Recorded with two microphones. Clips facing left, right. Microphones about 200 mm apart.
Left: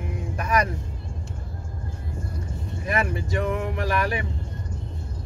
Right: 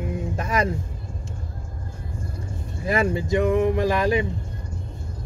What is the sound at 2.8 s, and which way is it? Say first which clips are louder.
Speech: right 4 dB; 25° right (ahead or behind).